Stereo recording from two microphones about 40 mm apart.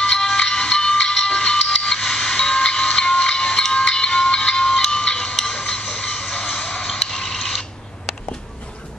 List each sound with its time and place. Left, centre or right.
0.0 s music: centre
5.3 s a sound: centre
5.6 s music: centre
6.8 s mechanisms: centre